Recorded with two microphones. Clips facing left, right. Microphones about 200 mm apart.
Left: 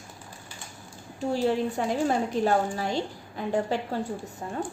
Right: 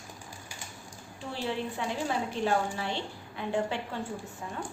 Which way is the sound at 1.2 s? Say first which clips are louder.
Left 9 dB; 40° left (ahead or behind).